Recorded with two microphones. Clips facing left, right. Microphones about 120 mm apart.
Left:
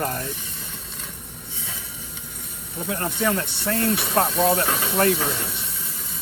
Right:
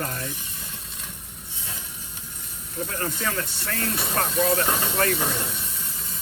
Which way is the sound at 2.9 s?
25° left (ahead or behind).